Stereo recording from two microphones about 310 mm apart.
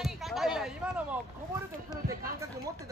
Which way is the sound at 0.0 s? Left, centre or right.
Centre.